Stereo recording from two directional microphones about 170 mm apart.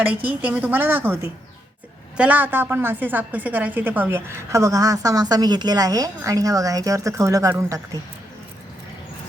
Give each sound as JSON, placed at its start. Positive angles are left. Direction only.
{"t": 0.0, "sound": "a woman's voice", "side_deg": -10}